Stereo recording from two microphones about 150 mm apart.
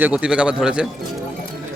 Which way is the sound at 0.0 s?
10° right (ahead or behind).